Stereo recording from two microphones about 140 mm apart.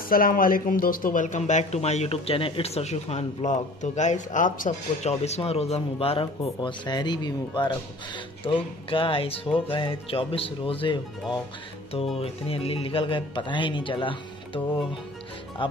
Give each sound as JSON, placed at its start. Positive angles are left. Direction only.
{"t": 0.1, "sound": "speech", "side_deg": 90}
{"t": 12.2, "sound": "speech", "side_deg": 45}
{"t": 15.6, "sound": "speech", "side_deg": 35}